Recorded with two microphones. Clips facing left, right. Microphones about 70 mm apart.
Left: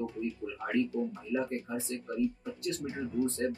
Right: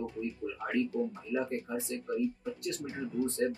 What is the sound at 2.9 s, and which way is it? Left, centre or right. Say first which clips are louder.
Speech: left 1 dB; centre.